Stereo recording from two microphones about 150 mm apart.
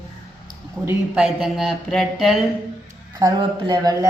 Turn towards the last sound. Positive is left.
turn(degrees=-30)  # may be behind; listen again after turning